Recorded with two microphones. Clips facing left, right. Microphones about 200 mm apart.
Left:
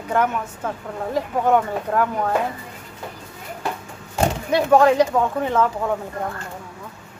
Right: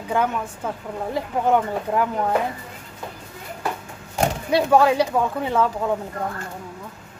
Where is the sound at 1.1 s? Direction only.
15° right (ahead or behind).